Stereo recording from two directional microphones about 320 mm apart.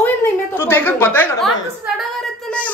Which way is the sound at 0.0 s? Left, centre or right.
Centre.